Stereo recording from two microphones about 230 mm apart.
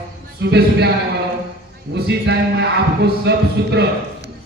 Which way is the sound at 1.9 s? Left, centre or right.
Right.